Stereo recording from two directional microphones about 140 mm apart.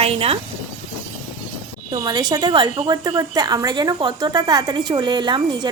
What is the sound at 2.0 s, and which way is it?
A woman's voice, 30° right (ahead or behind).